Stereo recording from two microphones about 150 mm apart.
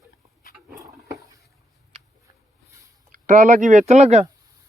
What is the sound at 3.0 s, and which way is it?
Speech, 60° right (ahead or behind).